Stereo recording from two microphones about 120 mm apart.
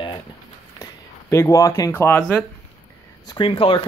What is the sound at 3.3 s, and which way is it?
Speech, 50° left (ahead or behind).